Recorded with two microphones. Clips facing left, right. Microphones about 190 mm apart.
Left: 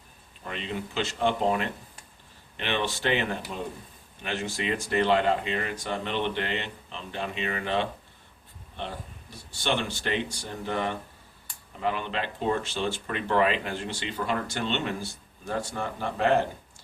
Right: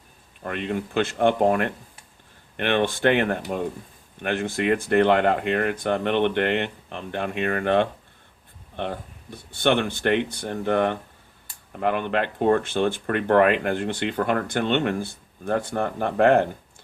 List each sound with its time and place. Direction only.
0.4 s speech: 55° right (ahead or behind)